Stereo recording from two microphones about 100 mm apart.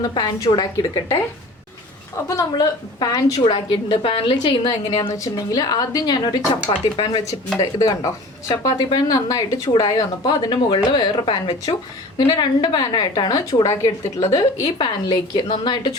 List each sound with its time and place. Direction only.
0.1 s a woman's voice: 40° left (ahead or behind)
2.2 s speech: 40° left (ahead or behind)
3.4 s a woman's voice: 60° left (ahead or behind)
5.0 s speech: 35° left (ahead or behind)
6.5 s a woman's voice: 55° left (ahead or behind)
7.3 s a woman's voice: 35° left (ahead or behind)